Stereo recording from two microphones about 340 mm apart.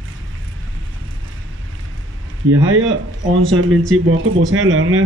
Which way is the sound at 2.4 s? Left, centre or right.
Right.